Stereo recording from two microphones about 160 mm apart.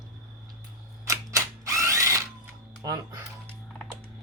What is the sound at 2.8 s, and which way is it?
Speech, 25° right (ahead or behind).